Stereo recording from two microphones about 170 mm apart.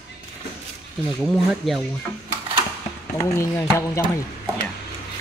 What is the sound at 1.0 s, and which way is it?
Speech, centre (ahead or behind).